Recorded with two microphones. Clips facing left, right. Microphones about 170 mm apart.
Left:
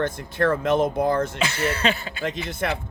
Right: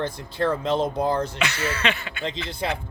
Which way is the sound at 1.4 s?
35° left (ahead or behind).